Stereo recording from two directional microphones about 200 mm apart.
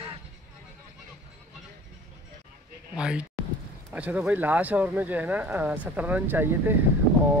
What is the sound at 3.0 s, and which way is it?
Speech, 5° right (ahead or behind).